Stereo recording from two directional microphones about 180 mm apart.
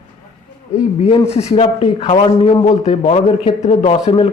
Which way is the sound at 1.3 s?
35° left (ahead or behind).